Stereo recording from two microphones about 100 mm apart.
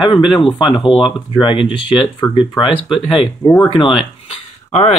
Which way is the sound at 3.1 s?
60° left (ahead or behind).